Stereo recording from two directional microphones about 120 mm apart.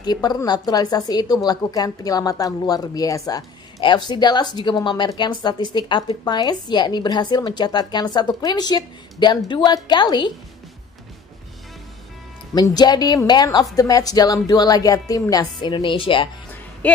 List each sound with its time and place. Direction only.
0.0 s a woman's voice: 35° left (ahead or behind)
12.7 s a woman's voice: 35° left (ahead or behind)